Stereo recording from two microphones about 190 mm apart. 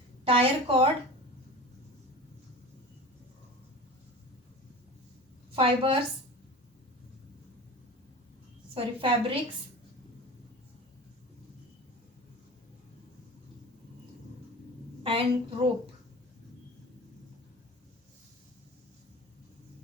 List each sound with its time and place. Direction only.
0.3 s a woman's voice: 30° right (ahead or behind)
5.5 s a woman's voice: 30° right (ahead or behind)
8.7 s a woman's voice: 30° right (ahead or behind)
15.0 s a woman's voice: 30° right (ahead or behind)